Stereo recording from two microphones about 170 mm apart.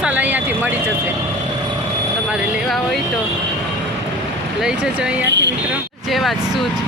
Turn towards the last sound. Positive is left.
turn(degrees=0)  # may be behind; listen again after turning